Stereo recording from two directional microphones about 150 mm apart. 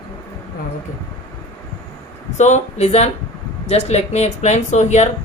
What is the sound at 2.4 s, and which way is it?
Speech, 50° left (ahead or behind).